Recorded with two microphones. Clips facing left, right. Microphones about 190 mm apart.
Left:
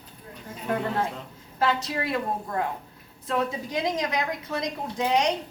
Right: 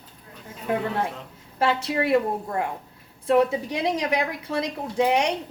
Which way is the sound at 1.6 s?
30° right (ahead or behind).